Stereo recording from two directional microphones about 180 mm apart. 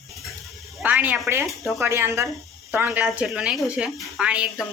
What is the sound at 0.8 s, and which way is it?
Speech, 10° right (ahead or behind).